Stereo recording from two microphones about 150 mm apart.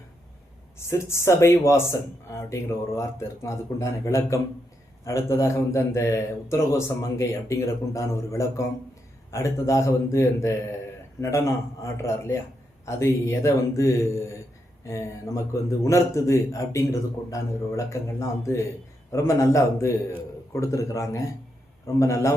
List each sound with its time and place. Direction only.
0.8 s speech: 20° left (ahead or behind)